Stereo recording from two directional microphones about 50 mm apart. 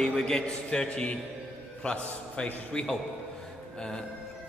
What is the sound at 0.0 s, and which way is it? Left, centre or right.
A man's voice, centre.